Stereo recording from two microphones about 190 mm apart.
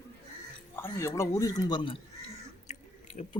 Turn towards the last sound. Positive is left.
turn(degrees=35)  # may be behind; listen again after turning